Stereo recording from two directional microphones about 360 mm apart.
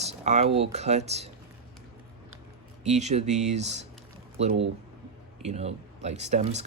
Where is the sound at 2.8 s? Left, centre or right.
Centre.